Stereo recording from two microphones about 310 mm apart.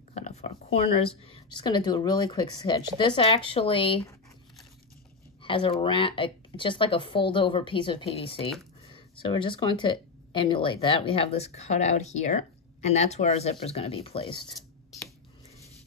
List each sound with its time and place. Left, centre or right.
0.1 s speech: left
5.4 s speech: centre